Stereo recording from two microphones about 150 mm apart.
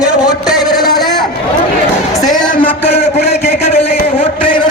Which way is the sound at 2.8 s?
45° left (ahead or behind).